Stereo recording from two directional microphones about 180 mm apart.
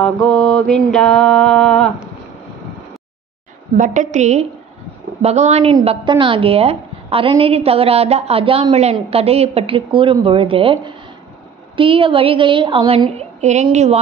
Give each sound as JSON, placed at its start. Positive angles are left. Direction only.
{"t": 0.0, "sound": "mantra", "side_deg": 5}
{"t": 3.7, "sound": "a woman's voice", "side_deg": -45}